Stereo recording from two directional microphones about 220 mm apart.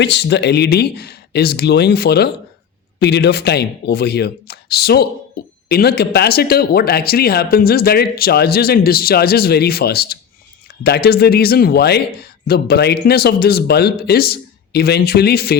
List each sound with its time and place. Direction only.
0.0 s speech: 50° left (ahead or behind)